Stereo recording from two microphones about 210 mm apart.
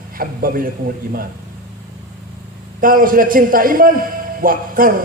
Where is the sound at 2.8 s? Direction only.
40° right (ahead or behind).